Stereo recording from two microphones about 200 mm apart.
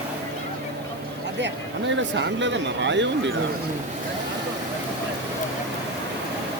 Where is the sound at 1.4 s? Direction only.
65° right (ahead or behind).